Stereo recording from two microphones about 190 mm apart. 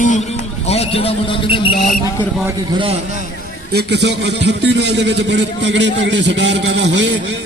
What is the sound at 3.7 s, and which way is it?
A man's voice, 60° right (ahead or behind).